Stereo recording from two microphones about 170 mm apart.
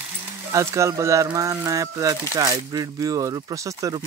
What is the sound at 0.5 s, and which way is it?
Speech, 20° right (ahead or behind).